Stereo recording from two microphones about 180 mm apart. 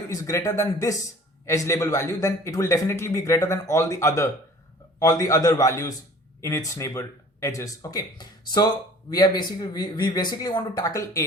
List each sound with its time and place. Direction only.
0.1 s a man's voice: 15° left (ahead or behind)